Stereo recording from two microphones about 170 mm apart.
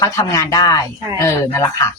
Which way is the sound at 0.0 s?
20° left (ahead or behind).